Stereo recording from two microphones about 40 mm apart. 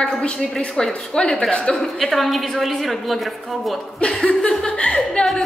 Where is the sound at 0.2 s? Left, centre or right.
Left.